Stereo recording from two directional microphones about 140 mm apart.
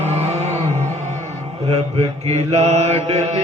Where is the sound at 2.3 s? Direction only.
50° right (ahead or behind).